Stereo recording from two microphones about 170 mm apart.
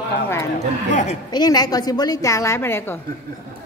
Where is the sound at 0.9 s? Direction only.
45° left (ahead or behind).